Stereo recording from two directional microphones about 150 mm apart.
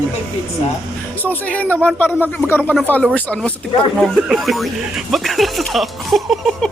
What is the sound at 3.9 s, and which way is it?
Speech, centre (ahead or behind).